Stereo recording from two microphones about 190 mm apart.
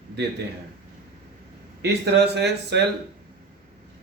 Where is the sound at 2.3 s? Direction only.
60° right (ahead or behind).